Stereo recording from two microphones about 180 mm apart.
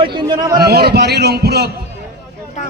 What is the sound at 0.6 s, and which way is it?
A man's voice, 60° right (ahead or behind).